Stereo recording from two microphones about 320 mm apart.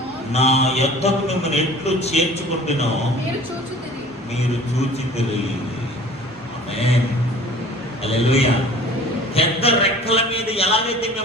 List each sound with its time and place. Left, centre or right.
0.3 s a man's voice: centre
6.7 s a man's voice: centre
8.0 s a man's voice: centre